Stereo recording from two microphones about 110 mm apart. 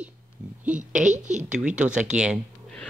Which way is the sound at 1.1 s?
90° right.